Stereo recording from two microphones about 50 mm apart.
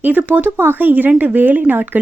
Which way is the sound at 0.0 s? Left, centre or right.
Right.